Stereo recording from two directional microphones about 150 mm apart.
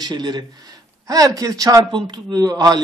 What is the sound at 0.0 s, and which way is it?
A man's voice, 25° right (ahead or behind).